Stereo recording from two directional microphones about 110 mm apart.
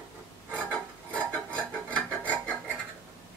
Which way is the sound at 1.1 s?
15° left (ahead or behind).